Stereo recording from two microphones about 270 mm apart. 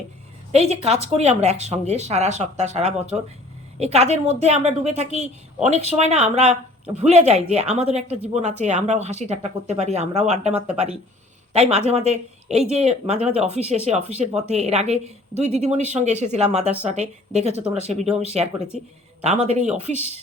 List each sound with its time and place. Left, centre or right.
0.5 s speech: right